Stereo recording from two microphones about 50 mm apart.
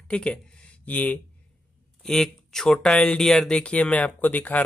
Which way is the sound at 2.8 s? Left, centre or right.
Centre.